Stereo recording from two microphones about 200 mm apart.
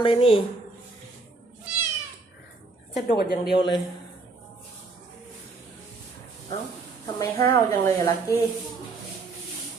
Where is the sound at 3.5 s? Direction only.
25° left (ahead or behind).